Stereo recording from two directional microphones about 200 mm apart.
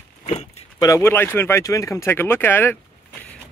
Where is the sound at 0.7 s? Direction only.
15° left (ahead or behind).